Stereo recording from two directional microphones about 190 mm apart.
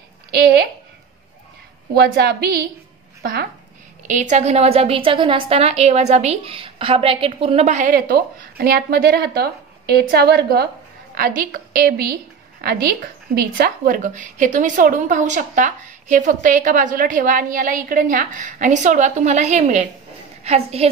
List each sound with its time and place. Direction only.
2.0 s a woman's voice: 60° right (ahead or behind)
4.1 s a woman's voice: 40° right (ahead or behind)